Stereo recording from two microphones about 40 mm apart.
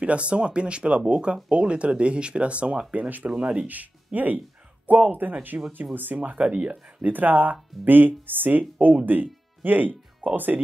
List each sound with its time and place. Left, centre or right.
0.0 s speech: right
6.4 s speech: right
6.7 s speech: right